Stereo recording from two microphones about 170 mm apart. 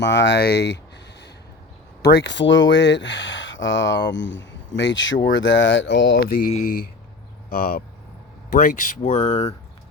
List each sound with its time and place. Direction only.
0.0 s speech: 90° left
2.0 s speech: 80° left; by 9.6 s 40° left (ahead or behind)